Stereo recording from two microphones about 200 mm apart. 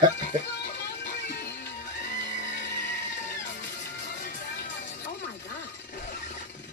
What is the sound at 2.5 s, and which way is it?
Music, 60° left (ahead or behind).